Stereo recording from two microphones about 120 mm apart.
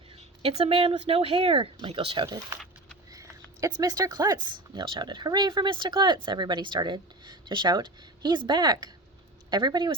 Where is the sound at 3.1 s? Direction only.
30° right (ahead or behind).